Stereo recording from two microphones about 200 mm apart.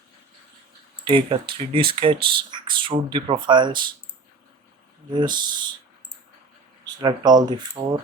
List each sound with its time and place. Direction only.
1.0 s speech: 25° right (ahead or behind)
5.1 s speech: 20° right (ahead or behind)
6.8 s speech: 20° right (ahead or behind)